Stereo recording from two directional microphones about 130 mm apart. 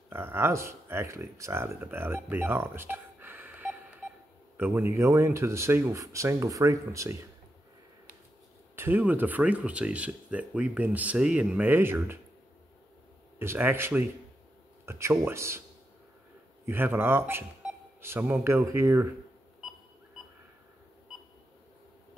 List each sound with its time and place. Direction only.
0.1 s speech: 20° right (ahead or behind)
8.7 s speech: 15° right (ahead or behind)
13.4 s speech: 15° right (ahead or behind)
16.6 s speech: 15° right (ahead or behind)